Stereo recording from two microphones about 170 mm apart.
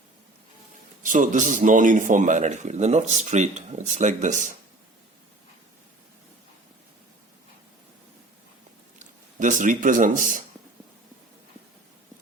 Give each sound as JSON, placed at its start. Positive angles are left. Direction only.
{"t": 1.0, "sound": "speech", "side_deg": -50}
{"t": 9.0, "sound": "a man's voice", "side_deg": -50}